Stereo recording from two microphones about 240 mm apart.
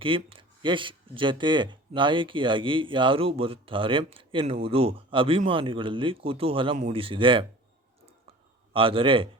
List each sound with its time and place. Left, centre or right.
0.0 s speech: right
8.7 s speech: right